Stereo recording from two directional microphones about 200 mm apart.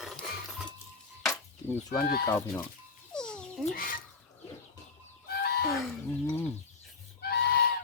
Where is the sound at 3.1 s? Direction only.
5° left (ahead or behind).